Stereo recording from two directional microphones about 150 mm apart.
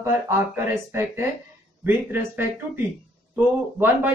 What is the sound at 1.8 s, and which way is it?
Speech, 15° right (ahead or behind).